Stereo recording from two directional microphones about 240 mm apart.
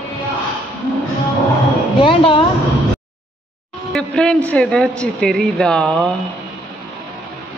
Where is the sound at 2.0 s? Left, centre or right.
Left.